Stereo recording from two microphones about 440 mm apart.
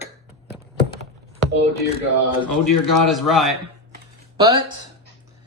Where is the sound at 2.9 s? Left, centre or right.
Centre.